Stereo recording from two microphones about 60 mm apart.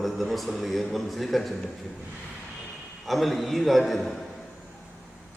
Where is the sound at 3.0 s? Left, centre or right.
Centre.